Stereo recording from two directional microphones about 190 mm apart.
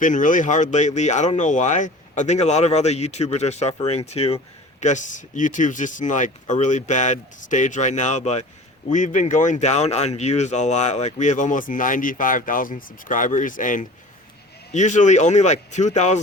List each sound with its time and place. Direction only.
0.0 s speech: 45° left (ahead or behind)